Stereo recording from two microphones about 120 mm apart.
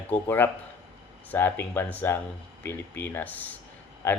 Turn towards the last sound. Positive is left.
turn(degrees=20)  # may be behind; listen again after turning